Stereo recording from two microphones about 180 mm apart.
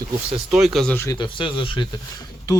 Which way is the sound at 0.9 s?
15° left (ahead or behind).